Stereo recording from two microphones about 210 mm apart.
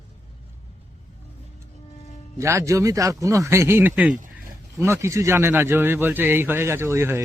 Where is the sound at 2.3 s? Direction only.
15° right (ahead or behind).